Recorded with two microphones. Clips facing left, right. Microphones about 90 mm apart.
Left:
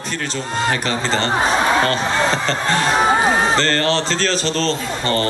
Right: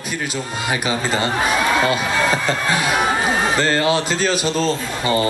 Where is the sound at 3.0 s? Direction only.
30° left (ahead or behind).